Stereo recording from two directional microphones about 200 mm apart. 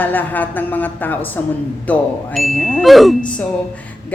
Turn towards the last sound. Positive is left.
turn(degrees=0)  # may be behind; listen again after turning